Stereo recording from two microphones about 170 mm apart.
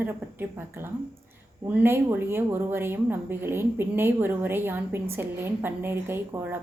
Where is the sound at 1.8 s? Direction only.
15° right (ahead or behind).